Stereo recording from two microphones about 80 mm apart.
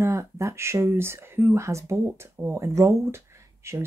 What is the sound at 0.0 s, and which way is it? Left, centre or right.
Speech, right.